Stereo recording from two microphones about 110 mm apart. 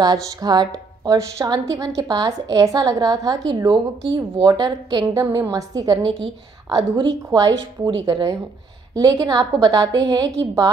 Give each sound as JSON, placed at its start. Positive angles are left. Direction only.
{"t": 0.0, "sound": "a woman's voice", "side_deg": -35}
{"t": 7.2, "sound": "a woman's voice", "side_deg": -35}